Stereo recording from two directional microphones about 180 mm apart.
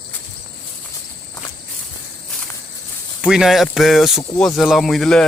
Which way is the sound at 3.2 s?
5° right (ahead or behind).